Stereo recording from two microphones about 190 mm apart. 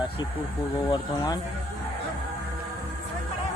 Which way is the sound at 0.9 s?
20° left (ahead or behind).